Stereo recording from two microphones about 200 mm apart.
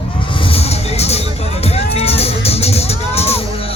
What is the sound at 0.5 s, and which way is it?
Music, 30° left (ahead or behind).